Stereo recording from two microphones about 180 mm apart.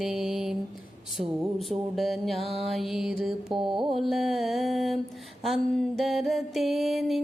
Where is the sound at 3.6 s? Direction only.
25° right (ahead or behind).